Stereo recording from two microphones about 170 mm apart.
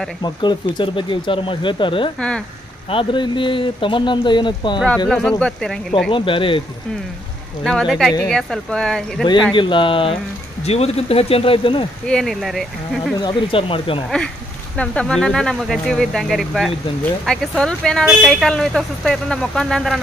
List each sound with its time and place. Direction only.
0.2 s speech: 25° left (ahead or behind)
2.1 s speech: 5° left (ahead or behind)
2.9 s speech: 30° left (ahead or behind)
4.8 s speech: 5° left (ahead or behind)
6.0 s speech: 30° left (ahead or behind)
7.6 s speech: centre (ahead or behind)
9.5 s speech: 30° left (ahead or behind)
12.1 s speech: centre (ahead or behind)
13.2 s speech: 30° left (ahead or behind)
14.8 s speech: 5° left (ahead or behind)